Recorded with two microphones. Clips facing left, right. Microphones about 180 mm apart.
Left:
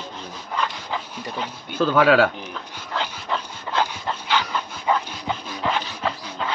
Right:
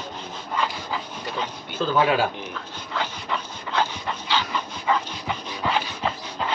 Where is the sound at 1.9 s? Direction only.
75° left (ahead or behind).